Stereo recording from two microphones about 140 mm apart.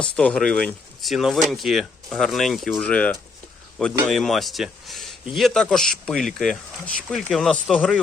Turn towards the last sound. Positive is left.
turn(degrees=0)  # may be behind; listen again after turning